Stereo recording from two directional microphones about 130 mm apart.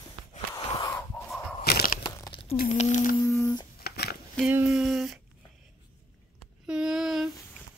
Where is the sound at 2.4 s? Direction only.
55° left (ahead or behind); by 3.2 s 80° left.